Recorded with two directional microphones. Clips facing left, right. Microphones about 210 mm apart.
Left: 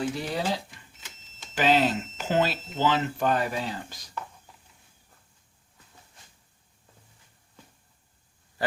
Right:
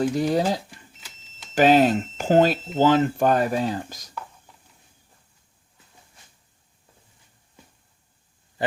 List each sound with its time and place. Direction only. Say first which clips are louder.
0.0 s speech: right 8 dB; 45° right (ahead or behind)